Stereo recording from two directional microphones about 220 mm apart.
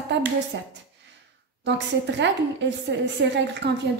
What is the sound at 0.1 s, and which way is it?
A woman's voice, 50° right (ahead or behind).